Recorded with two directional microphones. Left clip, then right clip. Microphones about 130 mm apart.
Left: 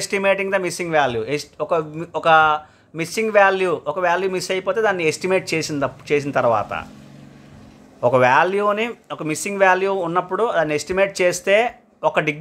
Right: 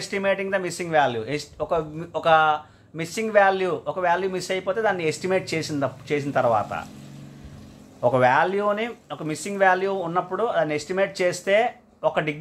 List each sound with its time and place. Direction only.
0.0 s speech: 45° left (ahead or behind)
8.0 s speech: 40° left (ahead or behind)